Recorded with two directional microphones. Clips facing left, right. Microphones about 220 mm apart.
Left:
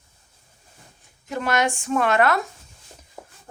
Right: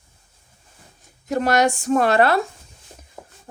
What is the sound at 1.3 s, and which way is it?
Speech, 40° right (ahead or behind).